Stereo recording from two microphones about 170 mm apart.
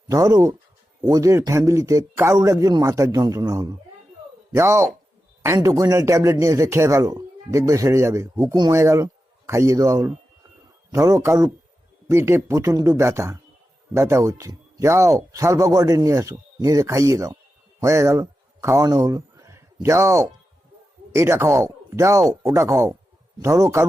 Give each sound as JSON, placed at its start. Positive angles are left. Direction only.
{"t": 0.1, "sound": "a man's voice", "side_deg": -20}